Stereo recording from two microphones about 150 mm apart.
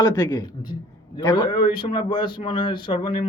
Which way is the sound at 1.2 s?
30° left (ahead or behind).